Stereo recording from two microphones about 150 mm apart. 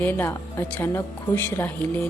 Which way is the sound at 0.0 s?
15° left (ahead or behind).